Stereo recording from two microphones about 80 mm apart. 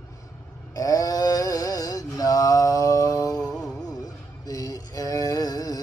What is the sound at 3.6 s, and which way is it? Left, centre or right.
Music, centre.